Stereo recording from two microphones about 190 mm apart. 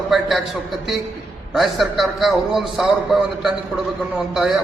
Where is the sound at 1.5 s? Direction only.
Centre (ahead or behind).